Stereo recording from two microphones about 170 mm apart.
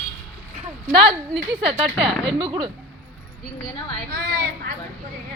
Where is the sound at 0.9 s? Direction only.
30° right (ahead or behind).